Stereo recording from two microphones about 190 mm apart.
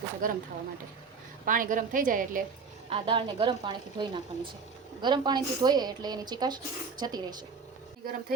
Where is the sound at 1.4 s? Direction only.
45° right (ahead or behind).